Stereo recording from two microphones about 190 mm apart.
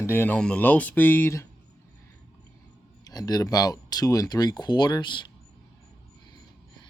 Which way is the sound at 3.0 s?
20° left (ahead or behind).